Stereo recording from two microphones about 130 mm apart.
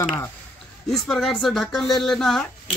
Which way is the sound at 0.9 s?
Centre (ahead or behind).